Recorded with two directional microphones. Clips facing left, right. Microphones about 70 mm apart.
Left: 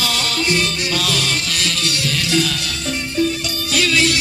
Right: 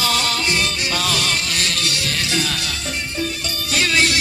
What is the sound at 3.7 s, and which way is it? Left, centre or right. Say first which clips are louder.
Music: left 1 dB; right.